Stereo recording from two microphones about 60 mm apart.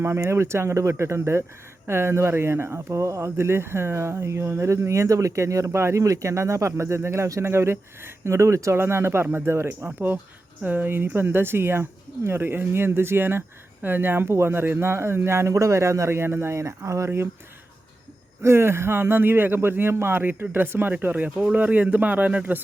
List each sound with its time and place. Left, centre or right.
0.3 s speech: right
5.7 s speech: right
6.0 s speech: right
7.4 s speech: right
8.7 s speech: right
18.4 s speech: right